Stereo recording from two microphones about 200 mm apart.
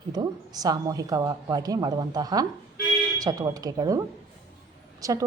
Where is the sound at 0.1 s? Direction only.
20° right (ahead or behind).